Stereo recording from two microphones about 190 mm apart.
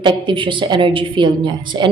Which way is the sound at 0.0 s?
25° right (ahead or behind).